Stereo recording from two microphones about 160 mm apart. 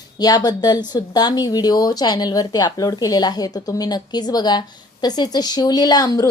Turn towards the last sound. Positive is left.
turn(degrees=25)  # may be behind; listen again after turning